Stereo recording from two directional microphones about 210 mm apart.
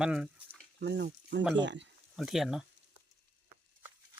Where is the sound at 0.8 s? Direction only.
50° right (ahead or behind).